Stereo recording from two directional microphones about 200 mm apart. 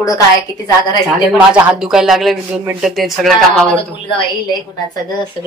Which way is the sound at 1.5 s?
5° right (ahead or behind).